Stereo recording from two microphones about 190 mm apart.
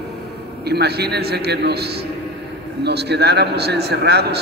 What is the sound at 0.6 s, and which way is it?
A man's voice, 55° right (ahead or behind).